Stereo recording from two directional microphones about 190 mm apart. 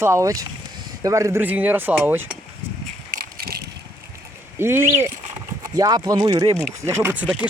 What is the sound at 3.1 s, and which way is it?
Vehicle, 50° right (ahead or behind).